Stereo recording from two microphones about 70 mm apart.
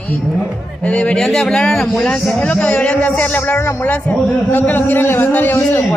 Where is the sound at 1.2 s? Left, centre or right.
Centre.